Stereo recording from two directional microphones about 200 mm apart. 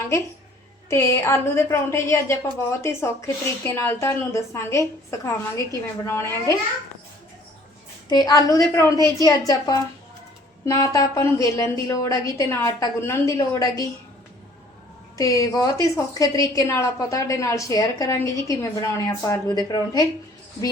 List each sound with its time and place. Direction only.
0.9 s a woman's voice: 15° left (ahead or behind)
8.1 s a woman's voice: 20° left (ahead or behind)
15.2 s a woman's voice: 15° left (ahead or behind)